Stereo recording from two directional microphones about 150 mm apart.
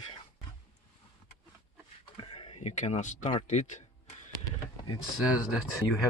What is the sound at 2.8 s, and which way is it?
Speech, 50° left (ahead or behind).